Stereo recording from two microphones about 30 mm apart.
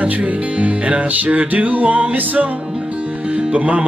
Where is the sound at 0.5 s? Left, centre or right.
Right.